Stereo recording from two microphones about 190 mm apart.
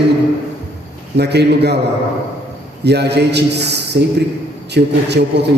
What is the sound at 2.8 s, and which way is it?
A man's voice, 60° right (ahead or behind).